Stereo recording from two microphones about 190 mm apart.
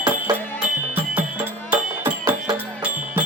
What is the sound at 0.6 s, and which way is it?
Music, 5° right (ahead or behind).